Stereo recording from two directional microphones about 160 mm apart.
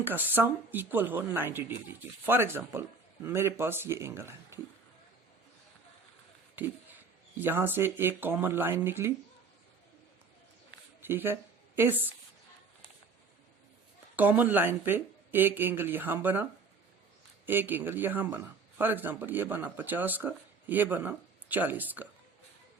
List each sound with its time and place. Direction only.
0.0 s speech: 10° right (ahead or behind)
6.6 s speech: 10° right (ahead or behind)
11.0 s speech: 15° right (ahead or behind)
14.2 s speech: 10° right (ahead or behind)